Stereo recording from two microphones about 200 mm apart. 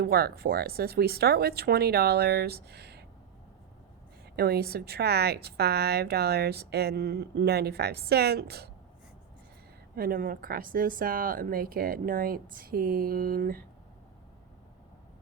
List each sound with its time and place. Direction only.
0.0 s a woman's voice: 50° right (ahead or behind)
4.4 s a woman's voice: 50° right (ahead or behind)
9.9 s a woman's voice: 50° right (ahead or behind)